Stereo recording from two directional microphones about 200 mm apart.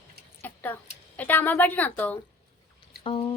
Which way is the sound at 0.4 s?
10° left (ahead or behind).